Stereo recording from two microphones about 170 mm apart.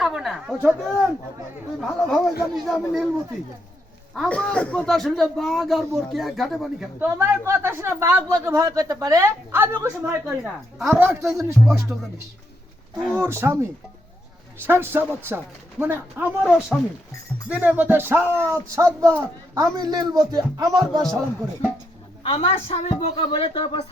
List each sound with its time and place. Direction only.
0.0 s a sound: centre (ahead or behind)
1.8 s a man's voice: centre (ahead or behind)
4.1 s a man's voice: 5° left (ahead or behind)
7.0 s speech: 15° right (ahead or behind)
11.3 s speech: 15° right (ahead or behind)
13.1 s speech: 15° right (ahead or behind)
22.2 s speech: 35° left (ahead or behind)